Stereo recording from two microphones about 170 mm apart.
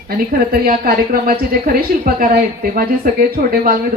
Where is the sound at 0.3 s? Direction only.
60° right (ahead or behind).